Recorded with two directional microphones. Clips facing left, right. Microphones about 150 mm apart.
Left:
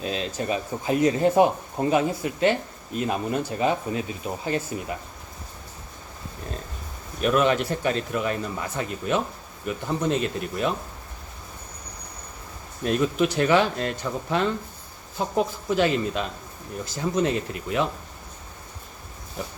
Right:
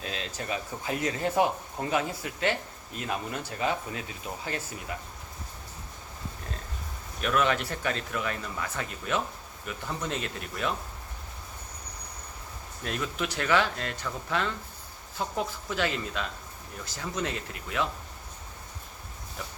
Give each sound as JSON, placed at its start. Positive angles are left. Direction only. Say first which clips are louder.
{"t": 0.0, "sound": "speech", "louder": "left 8 dB", "side_deg": 20}
{"t": 7.2, "sound": "speech", "louder": "left 6 dB", "side_deg": 20}
{"t": 12.8, "sound": "speech", "louder": "left 10 dB", "side_deg": 20}